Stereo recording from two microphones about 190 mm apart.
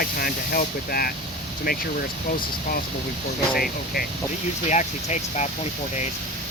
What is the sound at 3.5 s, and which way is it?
Speech, 50° left (ahead or behind).